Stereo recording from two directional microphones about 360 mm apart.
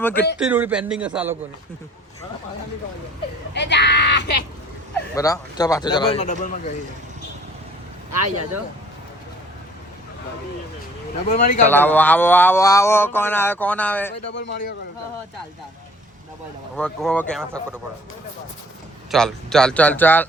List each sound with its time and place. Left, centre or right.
0.0 s speech: centre
3.5 s a sound: left
5.1 s speech: centre
11.3 s speech: left
11.7 s speech: centre
14.3 s speech: left
16.7 s speech: centre
19.1 s speech: centre